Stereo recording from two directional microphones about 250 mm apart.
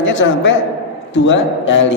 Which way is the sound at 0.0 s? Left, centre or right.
Left.